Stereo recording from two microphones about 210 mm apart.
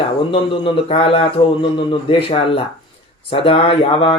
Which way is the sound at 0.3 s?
25° left (ahead or behind).